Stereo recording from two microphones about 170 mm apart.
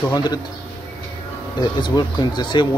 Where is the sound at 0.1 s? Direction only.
25° left (ahead or behind).